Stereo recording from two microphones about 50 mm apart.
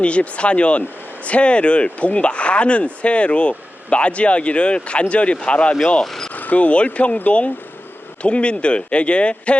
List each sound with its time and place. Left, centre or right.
0.0 s speech: left; by 6.3 s centre
6.3 s speech: left